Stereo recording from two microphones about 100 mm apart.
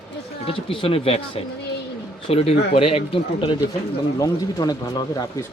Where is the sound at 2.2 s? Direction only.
80° left.